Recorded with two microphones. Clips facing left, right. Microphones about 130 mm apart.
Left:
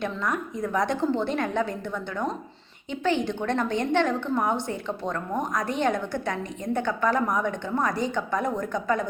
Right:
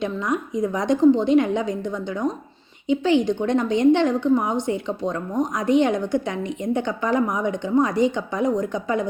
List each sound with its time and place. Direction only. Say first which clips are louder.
0.0 s a woman's voice: right 4 dB; 15° right (ahead or behind)